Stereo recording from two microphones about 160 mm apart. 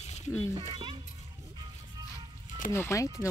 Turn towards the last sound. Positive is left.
turn(degrees=15)  # may be behind; listen again after turning